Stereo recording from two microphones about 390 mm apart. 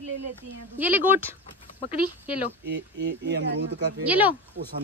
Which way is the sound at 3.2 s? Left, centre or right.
Right.